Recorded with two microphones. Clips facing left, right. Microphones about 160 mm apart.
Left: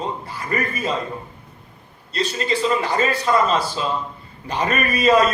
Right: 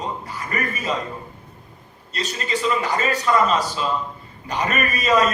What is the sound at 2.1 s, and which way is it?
A man's voice, 35° left (ahead or behind).